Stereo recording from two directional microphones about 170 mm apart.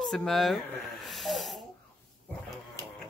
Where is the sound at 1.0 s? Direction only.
Centre (ahead or behind).